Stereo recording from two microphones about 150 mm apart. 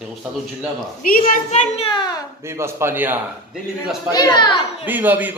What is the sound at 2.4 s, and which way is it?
Speech, 15° right (ahead or behind).